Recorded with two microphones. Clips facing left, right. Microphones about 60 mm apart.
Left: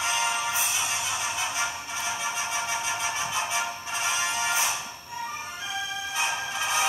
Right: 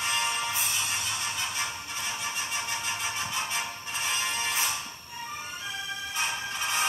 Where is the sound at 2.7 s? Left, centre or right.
Left.